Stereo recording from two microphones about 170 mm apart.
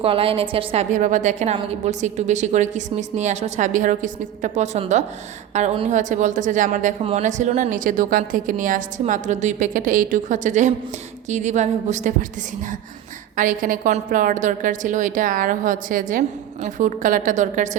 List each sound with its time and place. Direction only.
0.0 s a woman's voice: 35° right (ahead or behind)
13.3 s a woman's voice: 50° right (ahead or behind)